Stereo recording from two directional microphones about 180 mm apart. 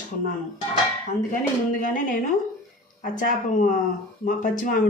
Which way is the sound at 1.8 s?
50° left (ahead or behind).